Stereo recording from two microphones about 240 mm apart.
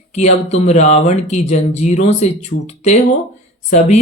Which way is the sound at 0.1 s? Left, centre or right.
Left.